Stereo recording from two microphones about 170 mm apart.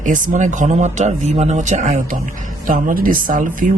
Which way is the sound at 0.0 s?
50° right (ahead or behind).